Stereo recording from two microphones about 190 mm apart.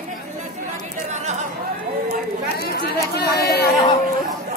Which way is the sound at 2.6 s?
55° left (ahead or behind).